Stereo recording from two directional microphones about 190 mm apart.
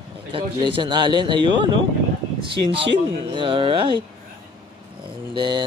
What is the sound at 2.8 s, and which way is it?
Speech, 25° right (ahead or behind).